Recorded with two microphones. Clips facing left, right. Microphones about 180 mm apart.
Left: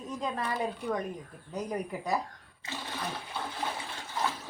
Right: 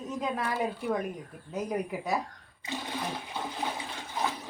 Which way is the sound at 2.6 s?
15° right (ahead or behind).